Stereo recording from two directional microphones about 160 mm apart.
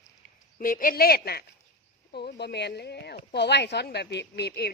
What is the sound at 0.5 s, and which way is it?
Speech, 60° left (ahead or behind).